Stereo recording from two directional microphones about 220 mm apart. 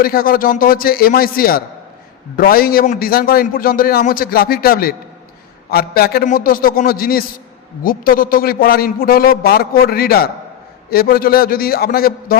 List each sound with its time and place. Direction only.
0.0 s a man's voice: 40° left (ahead or behind)